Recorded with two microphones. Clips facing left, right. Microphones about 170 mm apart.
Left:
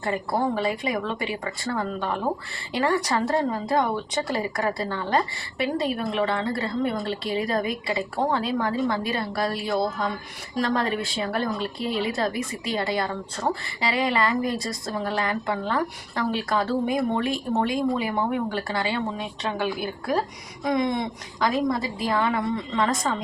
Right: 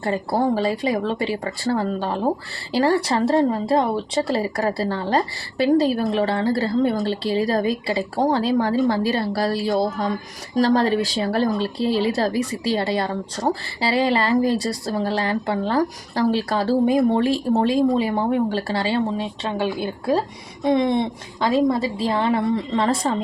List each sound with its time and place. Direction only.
0.0 s a woman's voice: 30° right (ahead or behind)